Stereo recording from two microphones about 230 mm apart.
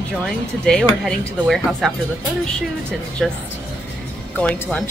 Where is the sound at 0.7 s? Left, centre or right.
Centre.